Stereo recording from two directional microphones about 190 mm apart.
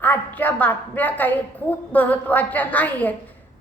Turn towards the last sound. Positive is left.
turn(degrees=10)  # may be behind; listen again after turning